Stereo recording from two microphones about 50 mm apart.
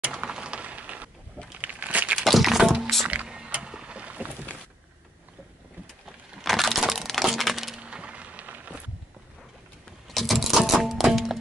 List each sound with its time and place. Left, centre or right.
0.0 s a sound: right
1.6 s crumpling: right
2.1 s music: centre
3.3 s music: centre
3.6 s boat: centre
6.4 s crack: centre
7.8 s a sound: right
10.0 s music: centre